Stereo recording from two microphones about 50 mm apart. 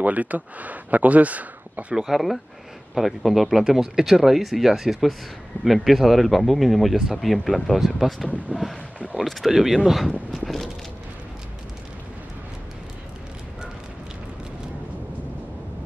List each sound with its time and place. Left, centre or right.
0.0 s speech: right
2.0 s speech: centre
8.5 s boat: right
9.2 s speech: centre